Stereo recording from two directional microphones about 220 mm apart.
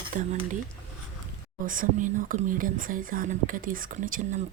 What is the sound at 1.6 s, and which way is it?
Speech, 40° right (ahead or behind).